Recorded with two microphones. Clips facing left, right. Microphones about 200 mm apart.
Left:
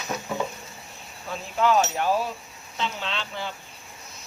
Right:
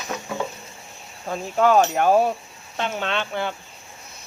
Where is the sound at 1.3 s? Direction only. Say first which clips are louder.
Right 4 dB; 45° right (ahead or behind).